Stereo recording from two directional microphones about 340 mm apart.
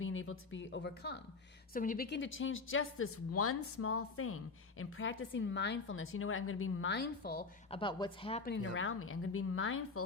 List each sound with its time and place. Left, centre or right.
0.0 s a woman's voice: left
7.8 s speech: centre
8.5 s a woman's voice: left